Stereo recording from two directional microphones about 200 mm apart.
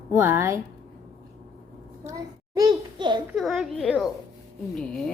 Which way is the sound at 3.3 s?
Centre (ahead or behind).